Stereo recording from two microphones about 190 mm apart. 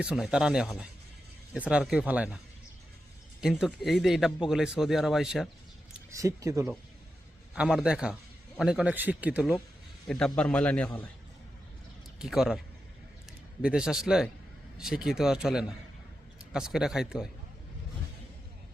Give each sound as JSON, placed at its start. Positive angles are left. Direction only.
{"t": 0.0, "sound": "speech", "side_deg": -5}
{"t": 3.4, "sound": "speech", "side_deg": 0}
{"t": 5.9, "sound": "speech", "side_deg": -15}
{"t": 7.5, "sound": "speech", "side_deg": -5}
{"t": 10.1, "sound": "a man's voice", "side_deg": 5}
{"t": 12.2, "sound": "speech", "side_deg": 0}